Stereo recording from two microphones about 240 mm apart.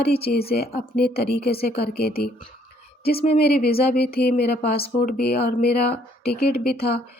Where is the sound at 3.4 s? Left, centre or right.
Left.